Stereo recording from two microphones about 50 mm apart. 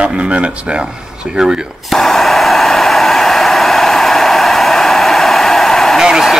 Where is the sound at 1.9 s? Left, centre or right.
Centre.